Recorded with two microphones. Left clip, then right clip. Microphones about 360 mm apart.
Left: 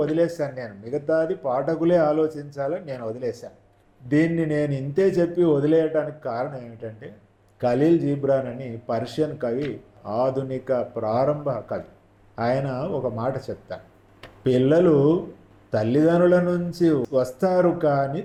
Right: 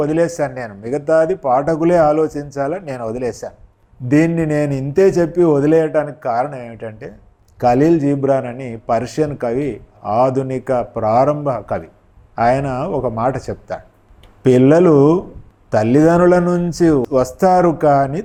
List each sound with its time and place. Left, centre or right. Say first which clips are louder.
0.0 s speech: right 6 dB; right